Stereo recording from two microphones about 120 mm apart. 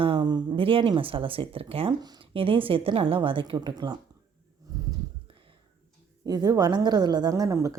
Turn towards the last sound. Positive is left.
turn(degrees=-25)  # may be behind; listen again after turning